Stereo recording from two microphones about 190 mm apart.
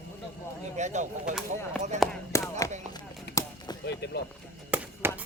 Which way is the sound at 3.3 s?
60° left (ahead or behind).